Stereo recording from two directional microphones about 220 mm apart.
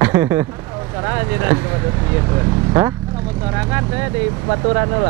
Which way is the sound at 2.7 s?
15° right (ahead or behind).